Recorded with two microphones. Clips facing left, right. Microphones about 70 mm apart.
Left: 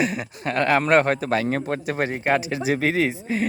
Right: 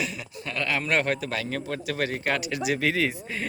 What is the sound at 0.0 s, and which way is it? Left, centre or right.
A man's voice, left.